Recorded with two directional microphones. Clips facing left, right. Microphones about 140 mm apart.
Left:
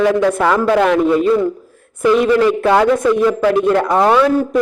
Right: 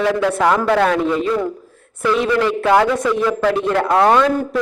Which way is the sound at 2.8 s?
15° left (ahead or behind).